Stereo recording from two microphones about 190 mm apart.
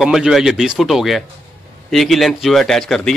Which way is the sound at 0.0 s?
Centre (ahead or behind).